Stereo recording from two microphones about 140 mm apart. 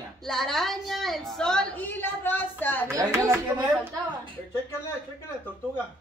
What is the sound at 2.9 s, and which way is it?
Speech, 20° right (ahead or behind).